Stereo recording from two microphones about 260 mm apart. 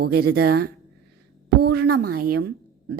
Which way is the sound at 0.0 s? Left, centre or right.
Right.